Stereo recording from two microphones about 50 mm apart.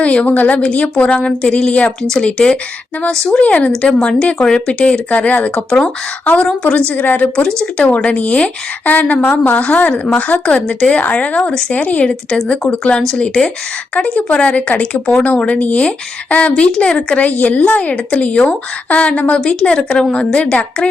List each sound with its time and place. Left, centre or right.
0.0 s speech: left
7.3 s speech: centre
11.3 s speech: centre
11.7 s speech: left
12.5 s speech: centre